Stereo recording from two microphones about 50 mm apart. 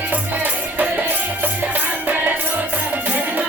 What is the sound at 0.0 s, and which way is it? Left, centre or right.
Music, right.